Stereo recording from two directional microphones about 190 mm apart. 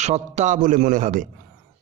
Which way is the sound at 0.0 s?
35° right (ahead or behind).